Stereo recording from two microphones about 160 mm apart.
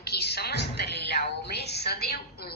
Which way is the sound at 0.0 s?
85° left.